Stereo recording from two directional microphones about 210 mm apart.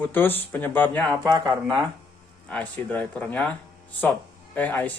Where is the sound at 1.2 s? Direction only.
15° right (ahead or behind).